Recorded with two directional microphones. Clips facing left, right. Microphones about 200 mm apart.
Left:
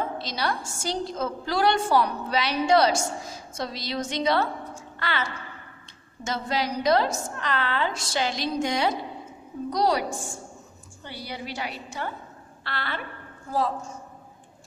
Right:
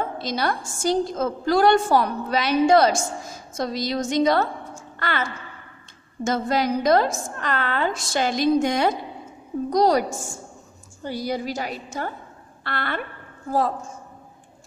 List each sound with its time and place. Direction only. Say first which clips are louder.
0.2 s a woman's voice: right 4 dB; 50° right (ahead or behind)